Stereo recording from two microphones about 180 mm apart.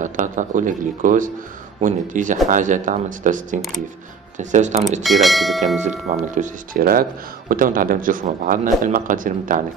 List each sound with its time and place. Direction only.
0.0 s speech: 45° right (ahead or behind)
5.0 s speech: centre (ahead or behind)
5.8 s speech: 40° right (ahead or behind)